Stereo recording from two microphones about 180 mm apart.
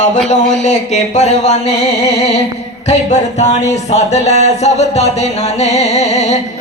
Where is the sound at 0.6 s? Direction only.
40° left (ahead or behind).